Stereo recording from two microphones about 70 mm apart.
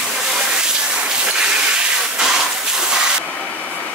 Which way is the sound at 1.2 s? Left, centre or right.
Centre.